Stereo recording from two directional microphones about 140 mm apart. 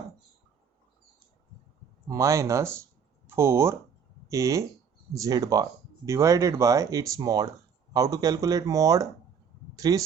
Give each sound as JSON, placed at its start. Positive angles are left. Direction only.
{"t": 2.0, "sound": "speech", "side_deg": -20}